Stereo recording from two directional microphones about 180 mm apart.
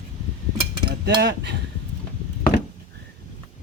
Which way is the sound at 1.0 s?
70° right (ahead or behind).